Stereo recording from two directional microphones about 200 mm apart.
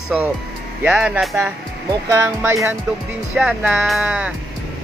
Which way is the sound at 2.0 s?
15° right (ahead or behind).